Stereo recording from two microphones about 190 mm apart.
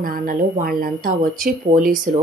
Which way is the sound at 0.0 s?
45° right (ahead or behind).